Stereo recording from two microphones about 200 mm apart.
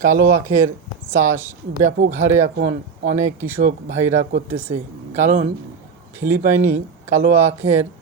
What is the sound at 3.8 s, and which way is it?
Speech, 50° right (ahead or behind).